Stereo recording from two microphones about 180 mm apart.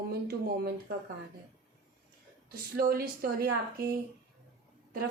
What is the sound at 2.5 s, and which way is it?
Speech, 55° right (ahead or behind).